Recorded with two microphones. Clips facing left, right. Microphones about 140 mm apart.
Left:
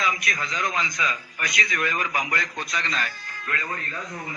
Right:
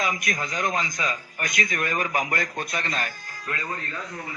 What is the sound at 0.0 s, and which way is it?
A man's voice, 45° right (ahead or behind).